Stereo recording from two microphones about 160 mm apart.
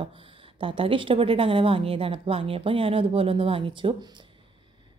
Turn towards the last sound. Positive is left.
turn(degrees=-30)  # may be behind; listen again after turning